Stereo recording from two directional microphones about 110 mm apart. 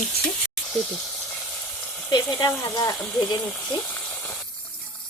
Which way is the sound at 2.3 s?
35° left (ahead or behind).